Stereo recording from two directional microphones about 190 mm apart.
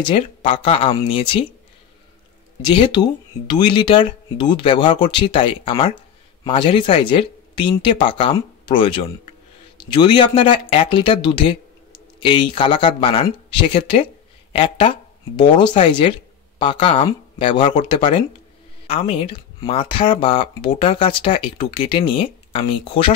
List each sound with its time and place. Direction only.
0.0 s speech: 30° left (ahead or behind)
2.6 s speech: 25° left (ahead or behind)